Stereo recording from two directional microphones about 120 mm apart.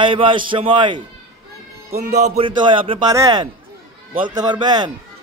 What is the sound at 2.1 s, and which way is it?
Speech, 75° right (ahead or behind).